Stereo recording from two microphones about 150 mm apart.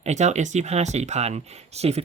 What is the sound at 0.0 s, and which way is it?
Speech, 50° right (ahead or behind).